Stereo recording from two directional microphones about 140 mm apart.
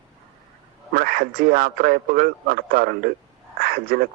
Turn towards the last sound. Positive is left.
turn(degrees=-90)